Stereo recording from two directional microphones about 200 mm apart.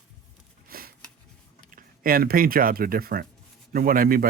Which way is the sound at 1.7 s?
45° right (ahead or behind).